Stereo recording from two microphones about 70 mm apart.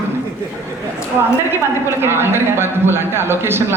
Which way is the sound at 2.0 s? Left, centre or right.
Right.